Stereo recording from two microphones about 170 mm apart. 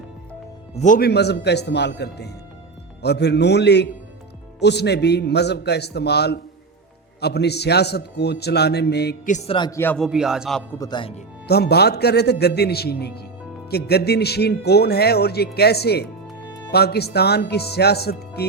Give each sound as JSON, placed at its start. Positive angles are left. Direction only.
{"t": 0.8, "sound": "speech", "side_deg": 50}
{"t": 1.0, "sound": "a man's voice", "side_deg": 80}
{"t": 9.5, "sound": "speech", "side_deg": 25}
{"t": 9.7, "sound": "a man's voice", "side_deg": 10}
{"t": 10.0, "sound": "a man's voice", "side_deg": -5}
{"t": 10.8, "sound": "speech", "side_deg": 25}
{"t": 11.4, "sound": "a man's voice", "side_deg": 70}